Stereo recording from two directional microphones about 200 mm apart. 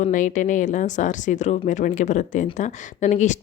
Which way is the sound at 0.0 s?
40° left (ahead or behind).